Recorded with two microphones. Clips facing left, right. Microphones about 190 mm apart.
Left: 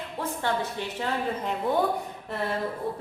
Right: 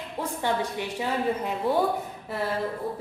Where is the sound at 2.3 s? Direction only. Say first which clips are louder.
Right 1 dB; centre (ahead or behind).